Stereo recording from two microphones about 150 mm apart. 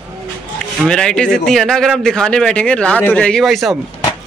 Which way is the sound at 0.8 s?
5° left (ahead or behind).